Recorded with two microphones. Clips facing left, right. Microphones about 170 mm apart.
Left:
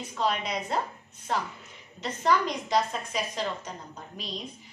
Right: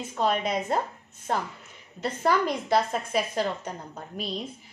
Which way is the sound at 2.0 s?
55° right (ahead or behind).